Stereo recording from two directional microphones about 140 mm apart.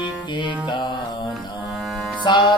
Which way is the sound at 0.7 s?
30° left (ahead or behind).